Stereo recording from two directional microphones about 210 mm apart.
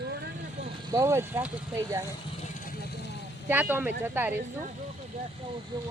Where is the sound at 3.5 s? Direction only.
10° right (ahead or behind).